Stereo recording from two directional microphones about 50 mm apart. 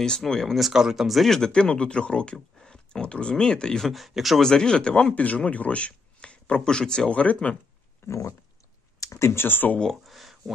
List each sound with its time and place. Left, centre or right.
0.0 s speech: centre
0.6 s speech: centre
3.8 s speech: centre
4.4 s speech: centre
7.1 s speech: left
8.1 s pig: left
9.0 s speech: left
9.4 s speech: left
9.8 s a sound: centre